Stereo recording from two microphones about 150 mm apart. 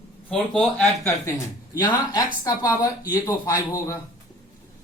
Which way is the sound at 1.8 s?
25° left (ahead or behind).